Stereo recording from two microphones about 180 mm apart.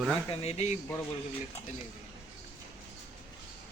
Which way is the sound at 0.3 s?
35° left (ahead or behind).